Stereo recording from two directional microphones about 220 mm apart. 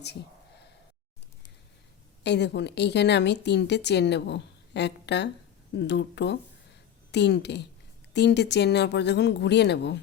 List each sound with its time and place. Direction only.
2.2 s speech: 50° left (ahead or behind)